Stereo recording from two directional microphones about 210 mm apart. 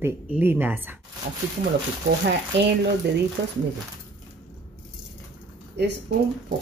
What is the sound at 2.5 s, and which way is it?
Speech, 55° right (ahead or behind).